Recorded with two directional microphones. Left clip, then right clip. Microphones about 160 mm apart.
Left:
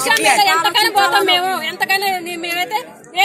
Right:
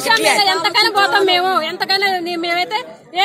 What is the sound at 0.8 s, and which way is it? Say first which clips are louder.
A woman's voice: even; centre (ahead or behind).